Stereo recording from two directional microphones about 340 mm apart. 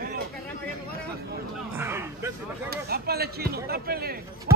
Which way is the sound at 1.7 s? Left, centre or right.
Centre.